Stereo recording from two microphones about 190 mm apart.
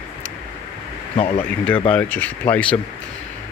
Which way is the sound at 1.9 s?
10° left (ahead or behind).